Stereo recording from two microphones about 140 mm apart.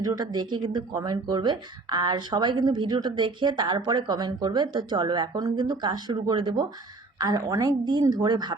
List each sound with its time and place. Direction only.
0.0 s a woman's voice: 30° right (ahead or behind)